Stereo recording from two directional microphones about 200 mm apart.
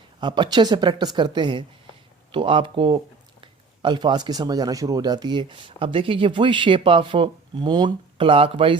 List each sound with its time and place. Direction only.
0.2 s speech: 25° right (ahead or behind)